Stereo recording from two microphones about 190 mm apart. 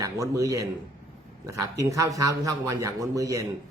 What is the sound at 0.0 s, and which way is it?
Speech, 15° right (ahead or behind).